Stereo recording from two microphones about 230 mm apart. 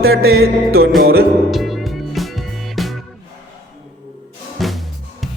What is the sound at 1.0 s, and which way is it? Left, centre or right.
Music, right.